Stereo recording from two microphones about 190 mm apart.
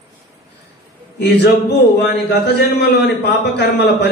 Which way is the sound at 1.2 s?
60° left (ahead or behind).